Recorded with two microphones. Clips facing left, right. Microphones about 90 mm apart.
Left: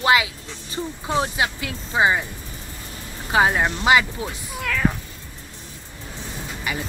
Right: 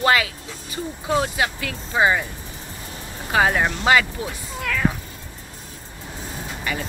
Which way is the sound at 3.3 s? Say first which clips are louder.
Even; 15° left (ahead or behind).